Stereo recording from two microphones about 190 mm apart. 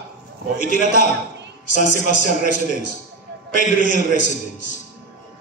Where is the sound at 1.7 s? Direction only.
40° left (ahead or behind).